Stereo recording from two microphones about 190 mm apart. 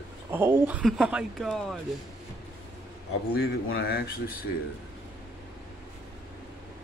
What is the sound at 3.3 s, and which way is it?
Speech, 55° left (ahead or behind).